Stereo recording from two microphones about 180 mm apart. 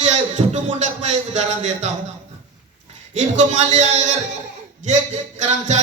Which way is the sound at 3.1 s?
40° right (ahead or behind).